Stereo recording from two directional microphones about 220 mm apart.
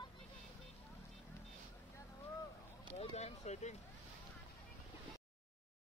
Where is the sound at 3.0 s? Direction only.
30° left (ahead or behind).